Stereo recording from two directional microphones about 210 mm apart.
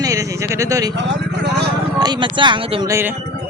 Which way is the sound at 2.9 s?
10° right (ahead or behind).